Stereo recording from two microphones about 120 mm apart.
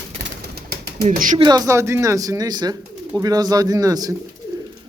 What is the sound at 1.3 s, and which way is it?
Speech, 35° right (ahead or behind).